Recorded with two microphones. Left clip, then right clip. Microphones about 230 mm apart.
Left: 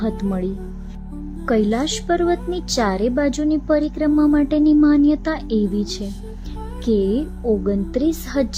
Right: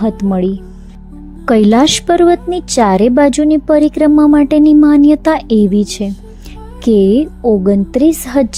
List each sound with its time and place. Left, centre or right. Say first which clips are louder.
0.2 s speech: right 9 dB; right
1.5 s a woman's voice: right 10 dB; right